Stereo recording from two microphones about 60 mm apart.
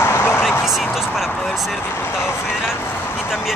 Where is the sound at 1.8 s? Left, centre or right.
Left.